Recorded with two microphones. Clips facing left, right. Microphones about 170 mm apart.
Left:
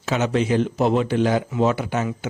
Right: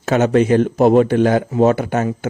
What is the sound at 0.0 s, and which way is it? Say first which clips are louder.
A man's voice: right 7 dB; 50° right (ahead or behind).